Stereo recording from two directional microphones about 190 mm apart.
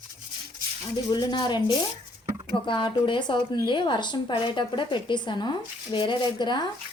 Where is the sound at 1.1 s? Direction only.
20° left (ahead or behind).